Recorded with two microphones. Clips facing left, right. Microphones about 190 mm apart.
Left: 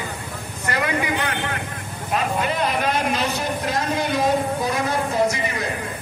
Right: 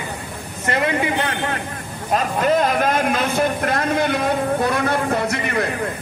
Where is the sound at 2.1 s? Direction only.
45° right (ahead or behind).